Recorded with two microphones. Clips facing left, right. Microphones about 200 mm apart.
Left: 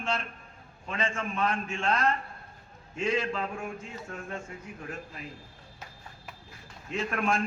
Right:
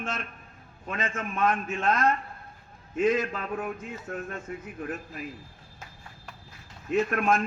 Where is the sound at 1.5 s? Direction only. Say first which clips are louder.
Right 2 dB; 30° left (ahead or behind).